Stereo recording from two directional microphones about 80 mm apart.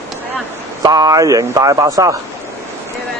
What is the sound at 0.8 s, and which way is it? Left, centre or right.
Speech, right.